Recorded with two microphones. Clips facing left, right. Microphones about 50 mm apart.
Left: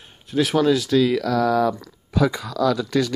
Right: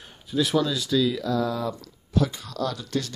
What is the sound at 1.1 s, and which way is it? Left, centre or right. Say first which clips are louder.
Speech: left 7 dB; left.